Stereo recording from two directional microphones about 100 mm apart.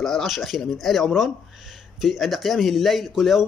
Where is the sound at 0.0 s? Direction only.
Centre (ahead or behind).